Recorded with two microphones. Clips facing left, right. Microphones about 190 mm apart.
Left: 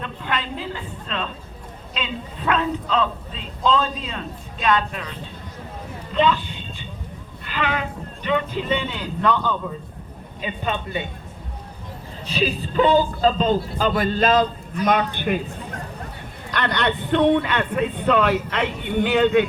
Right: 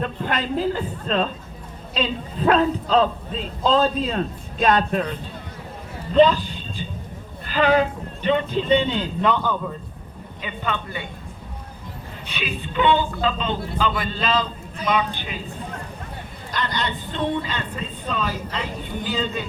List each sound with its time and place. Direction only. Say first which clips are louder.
0.0 s speech: right 3 dB; 45° right (ahead or behind)
6.1 s speech: right 5 dB; 40° right (ahead or behind); by 9.6 s 15° right (ahead or behind)
10.4 s a man's voice: left 2 dB; 20° left (ahead or behind)
12.2 s a man's voice: left 7 dB; 35° left (ahead or behind); by 15.4 s 55° left (ahead or behind)
16.5 s a man's voice: left 4 dB; 60° left (ahead or behind)